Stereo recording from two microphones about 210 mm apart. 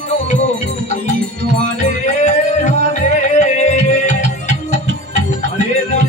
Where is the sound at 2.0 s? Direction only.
35° left (ahead or behind).